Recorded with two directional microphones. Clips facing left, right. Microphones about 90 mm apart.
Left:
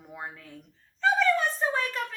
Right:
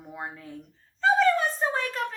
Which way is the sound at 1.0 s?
35° right (ahead or behind).